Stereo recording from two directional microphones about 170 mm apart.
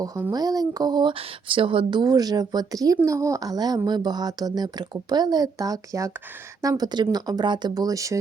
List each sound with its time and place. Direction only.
0.0 s speech: 20° right (ahead or behind)